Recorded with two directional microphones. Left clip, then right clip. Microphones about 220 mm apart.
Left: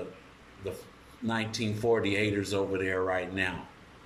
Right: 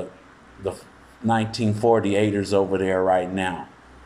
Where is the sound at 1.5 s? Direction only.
5° right (ahead or behind).